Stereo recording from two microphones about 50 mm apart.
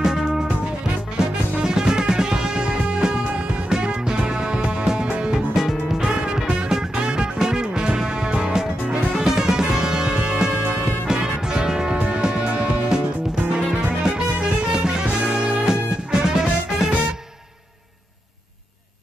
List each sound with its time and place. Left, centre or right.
0.0 s music: centre
5.5 s music: centre; by 12.4 s right
13.5 s music: right
15.6 s music: centre